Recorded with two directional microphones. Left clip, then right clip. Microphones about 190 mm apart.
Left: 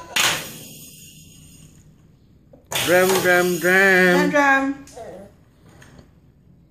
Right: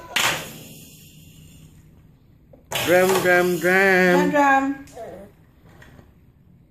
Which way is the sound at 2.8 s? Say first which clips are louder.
Left 1 dB; centre (ahead or behind).